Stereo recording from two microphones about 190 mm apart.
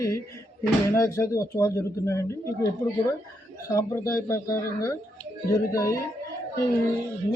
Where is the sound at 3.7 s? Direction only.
15° left (ahead or behind).